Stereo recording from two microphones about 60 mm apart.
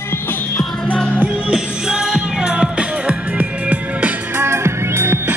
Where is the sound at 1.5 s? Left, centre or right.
Centre.